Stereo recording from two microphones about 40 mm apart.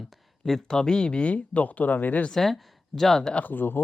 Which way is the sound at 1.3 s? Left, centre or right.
Left.